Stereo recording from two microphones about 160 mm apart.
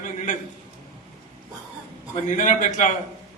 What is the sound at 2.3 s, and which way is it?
Speech, 50° left (ahead or behind).